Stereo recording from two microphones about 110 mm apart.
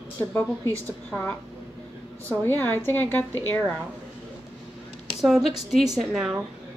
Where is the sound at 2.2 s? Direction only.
20° left (ahead or behind).